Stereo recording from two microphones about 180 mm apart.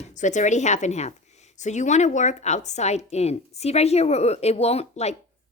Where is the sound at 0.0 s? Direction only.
45° left (ahead or behind).